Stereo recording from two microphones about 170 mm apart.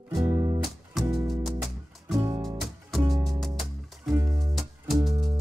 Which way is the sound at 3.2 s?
Centre (ahead or behind).